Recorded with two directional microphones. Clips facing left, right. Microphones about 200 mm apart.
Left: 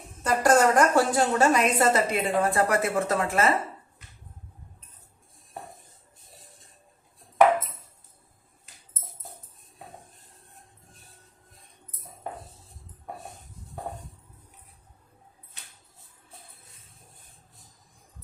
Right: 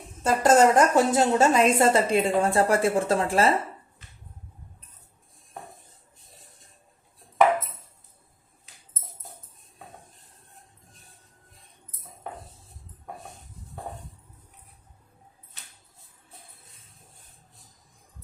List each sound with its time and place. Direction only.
0.2 s a woman's voice: 25° right (ahead or behind)